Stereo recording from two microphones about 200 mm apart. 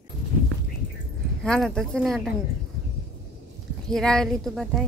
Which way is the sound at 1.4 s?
5° left (ahead or behind).